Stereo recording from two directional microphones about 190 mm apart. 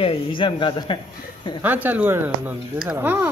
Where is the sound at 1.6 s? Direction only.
10° right (ahead or behind).